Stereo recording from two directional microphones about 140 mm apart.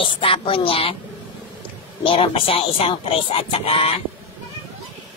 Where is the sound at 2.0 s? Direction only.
40° left (ahead or behind).